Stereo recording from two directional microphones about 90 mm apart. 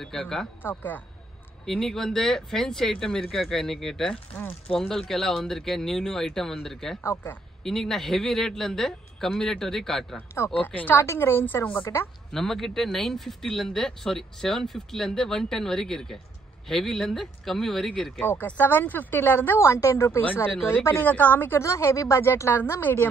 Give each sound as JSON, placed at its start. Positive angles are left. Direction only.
{"t": 0.0, "sound": "speech", "side_deg": 5}
{"t": 0.6, "sound": "a woman's voice", "side_deg": 20}
{"t": 1.7, "sound": "speech", "side_deg": 5}
{"t": 7.0, "sound": "a woman's voice", "side_deg": 25}
{"t": 7.6, "sound": "speech", "side_deg": 5}
{"t": 10.1, "sound": "a woman's voice", "side_deg": 30}
{"t": 10.5, "sound": "a woman's voice", "side_deg": 20}
{"t": 12.3, "sound": "speech", "side_deg": 5}
{"t": 18.2, "sound": "a woman's voice", "side_deg": 20}